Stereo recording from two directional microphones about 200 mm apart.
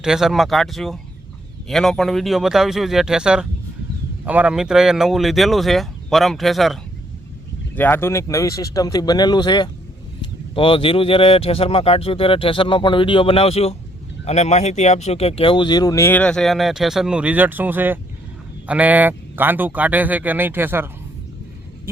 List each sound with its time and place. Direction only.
0.0 s speech: centre (ahead or behind)
7.8 s speech: 10° left (ahead or behind); by 20.9 s 10° right (ahead or behind)